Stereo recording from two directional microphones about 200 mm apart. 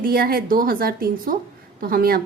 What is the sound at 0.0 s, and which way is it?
A woman's voice, 50° right (ahead or behind).